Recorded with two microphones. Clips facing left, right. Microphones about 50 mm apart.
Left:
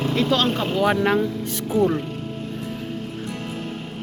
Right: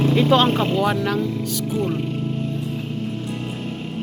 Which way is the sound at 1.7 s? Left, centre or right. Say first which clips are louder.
Left 5 dB; left.